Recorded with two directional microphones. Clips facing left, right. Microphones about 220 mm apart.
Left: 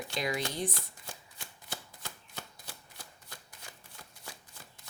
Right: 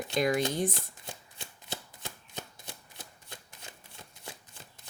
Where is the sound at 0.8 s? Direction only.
20° right (ahead or behind).